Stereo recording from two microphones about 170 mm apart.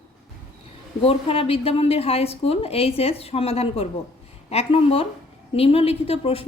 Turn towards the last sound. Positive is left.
turn(degrees=35)  # may be behind; listen again after turning